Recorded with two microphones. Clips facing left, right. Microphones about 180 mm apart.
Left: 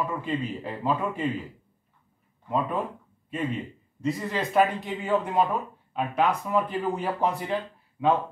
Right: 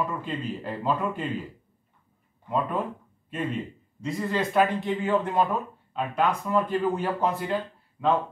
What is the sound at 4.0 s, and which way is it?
A man's voice, centre (ahead or behind).